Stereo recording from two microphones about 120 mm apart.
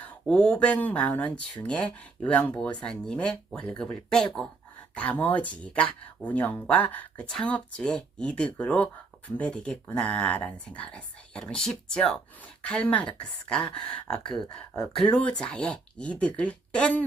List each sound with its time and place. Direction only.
0.0 s speech: 10° left (ahead or behind)
14.3 s speech: 40° left (ahead or behind)
14.9 s a woman's voice: 10° left (ahead or behind)